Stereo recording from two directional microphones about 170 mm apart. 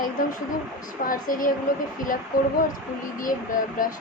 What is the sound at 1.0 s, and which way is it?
Speech, 55° left (ahead or behind).